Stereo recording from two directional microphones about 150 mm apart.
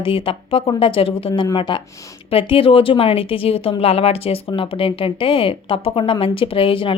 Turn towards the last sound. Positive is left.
turn(degrees=35)  # may be behind; listen again after turning